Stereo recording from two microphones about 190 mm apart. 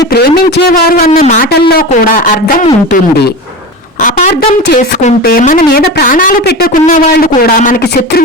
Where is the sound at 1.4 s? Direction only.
55° left (ahead or behind).